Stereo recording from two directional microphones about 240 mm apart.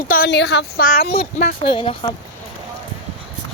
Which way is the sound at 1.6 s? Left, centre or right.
Left.